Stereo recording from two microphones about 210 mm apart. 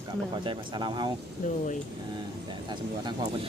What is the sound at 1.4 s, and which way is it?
Speech, 35° left (ahead or behind).